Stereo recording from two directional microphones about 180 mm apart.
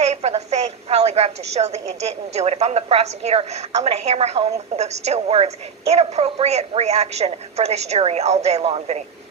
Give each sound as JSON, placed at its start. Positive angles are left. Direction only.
{"t": 0.0, "sound": "a woman's voice", "side_deg": -40}